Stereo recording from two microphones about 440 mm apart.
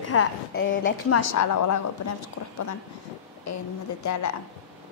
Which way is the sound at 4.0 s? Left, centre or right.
Left.